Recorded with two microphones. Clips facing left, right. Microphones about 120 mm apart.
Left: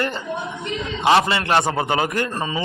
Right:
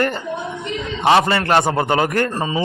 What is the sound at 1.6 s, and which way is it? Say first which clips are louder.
Speech: right 3 dB; 40° right (ahead or behind).